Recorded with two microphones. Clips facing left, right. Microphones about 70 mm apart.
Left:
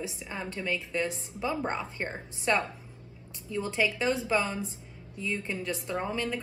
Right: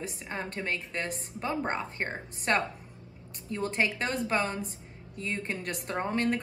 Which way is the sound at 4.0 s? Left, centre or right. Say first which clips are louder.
Left 2 dB; right.